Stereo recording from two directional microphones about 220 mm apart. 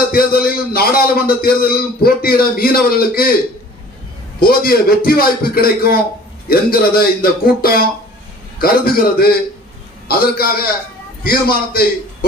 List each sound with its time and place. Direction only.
0.1 s a man's voice: 45° left (ahead or behind)
4.4 s a man's voice: 45° left (ahead or behind)